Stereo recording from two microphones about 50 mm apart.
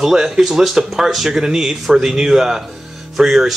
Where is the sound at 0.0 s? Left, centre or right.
Centre.